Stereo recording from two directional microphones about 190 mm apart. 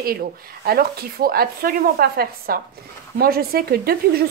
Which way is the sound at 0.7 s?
50° right (ahead or behind).